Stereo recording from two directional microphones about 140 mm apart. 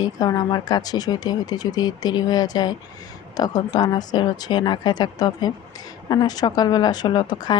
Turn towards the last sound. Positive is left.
turn(degrees=30)  # may be behind; listen again after turning